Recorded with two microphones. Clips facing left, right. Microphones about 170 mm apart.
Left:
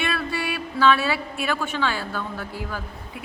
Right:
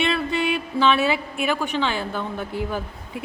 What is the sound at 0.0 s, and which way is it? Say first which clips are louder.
A woman's voice: right 4 dB; 20° right (ahead or behind).